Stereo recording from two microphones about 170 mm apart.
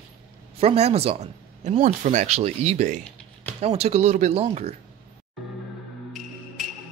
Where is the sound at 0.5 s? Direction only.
40° right (ahead or behind).